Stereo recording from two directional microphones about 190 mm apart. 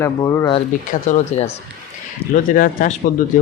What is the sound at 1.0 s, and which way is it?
Speech, 40° left (ahead or behind).